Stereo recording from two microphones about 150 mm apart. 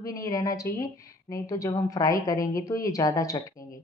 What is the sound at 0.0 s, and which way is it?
A woman's voice, 25° left (ahead or behind).